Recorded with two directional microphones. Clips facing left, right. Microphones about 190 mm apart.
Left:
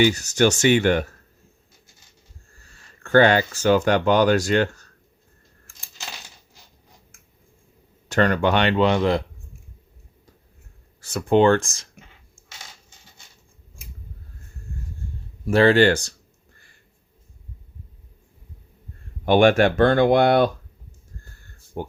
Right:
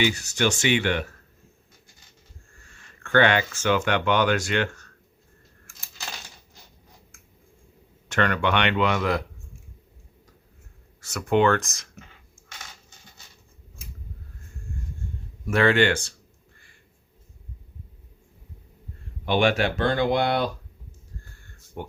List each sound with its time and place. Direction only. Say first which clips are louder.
0.0 s speech: left 6 dB; 40° left (ahead or behind)
2.5 s speech: even; 35° left (ahead or behind)
8.1 s speech: left 4 dB; 35° left (ahead or behind)
11.0 s speech: left 4 dB; 30° left (ahead or behind)
15.4 s speech: left 5 dB; 35° left (ahead or behind)
19.2 s speech: left 6 dB; 50° left (ahead or behind)
21.7 s speech: left 5 dB; 35° left (ahead or behind)